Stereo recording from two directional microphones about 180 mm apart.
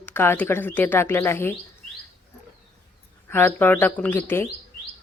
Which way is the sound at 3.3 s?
10° left (ahead or behind).